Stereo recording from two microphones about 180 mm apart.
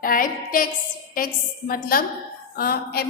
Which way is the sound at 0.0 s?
50° left (ahead or behind).